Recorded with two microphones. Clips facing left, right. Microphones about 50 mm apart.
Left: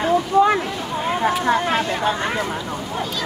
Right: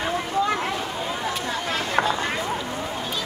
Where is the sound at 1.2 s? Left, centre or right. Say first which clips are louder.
Left 9 dB; left.